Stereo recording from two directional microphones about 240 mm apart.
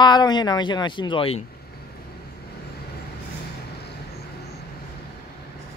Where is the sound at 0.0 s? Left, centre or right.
Centre.